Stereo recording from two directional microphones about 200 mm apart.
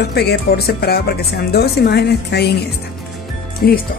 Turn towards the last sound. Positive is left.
turn(degrees=50)  # may be behind; listen again after turning